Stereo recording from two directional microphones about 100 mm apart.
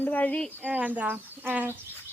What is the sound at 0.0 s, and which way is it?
Speech, 15° left (ahead or behind).